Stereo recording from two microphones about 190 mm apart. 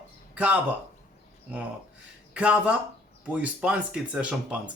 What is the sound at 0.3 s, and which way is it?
Speech, 10° right (ahead or behind).